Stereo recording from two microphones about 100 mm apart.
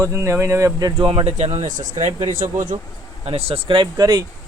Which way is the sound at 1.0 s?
65° right (ahead or behind).